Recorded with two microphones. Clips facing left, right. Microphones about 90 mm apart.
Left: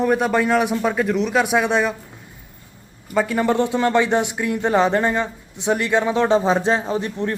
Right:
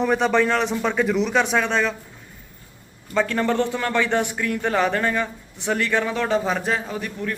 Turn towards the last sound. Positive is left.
turn(degrees=25)  # may be behind; listen again after turning